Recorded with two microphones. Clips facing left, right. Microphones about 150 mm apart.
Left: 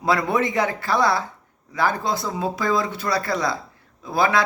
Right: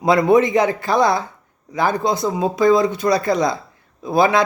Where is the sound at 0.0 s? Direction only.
20° right (ahead or behind).